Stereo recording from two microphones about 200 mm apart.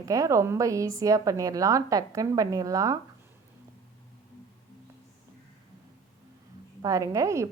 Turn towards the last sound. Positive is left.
turn(degrees=-15)  # may be behind; listen again after turning